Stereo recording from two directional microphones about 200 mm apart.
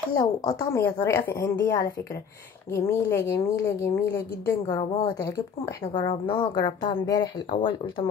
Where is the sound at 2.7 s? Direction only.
10° left (ahead or behind).